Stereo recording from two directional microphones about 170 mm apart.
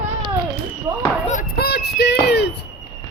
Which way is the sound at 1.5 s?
70° left (ahead or behind).